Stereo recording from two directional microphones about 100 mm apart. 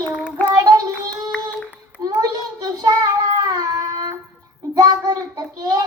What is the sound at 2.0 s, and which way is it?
Speech, 35° right (ahead or behind).